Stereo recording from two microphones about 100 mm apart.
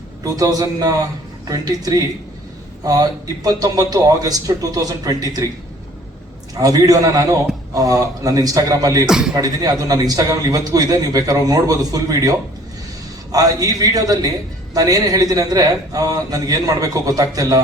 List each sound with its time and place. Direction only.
0.3 s a man's voice: 35° right (ahead or behind)
6.5 s a man's voice: 40° right (ahead or behind)
9.0 s speech: 5° right (ahead or behind)
9.3 s a man's voice: 40° right (ahead or behind)
13.3 s a man's voice: 40° right (ahead or behind)